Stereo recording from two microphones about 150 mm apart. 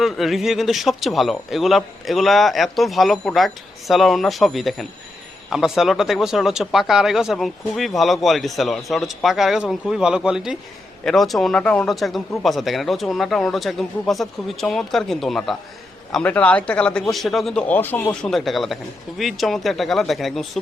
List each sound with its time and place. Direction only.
0.0 s a man's voice: centre (ahead or behind)